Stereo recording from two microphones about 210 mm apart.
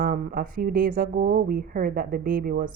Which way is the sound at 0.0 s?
45° right (ahead or behind).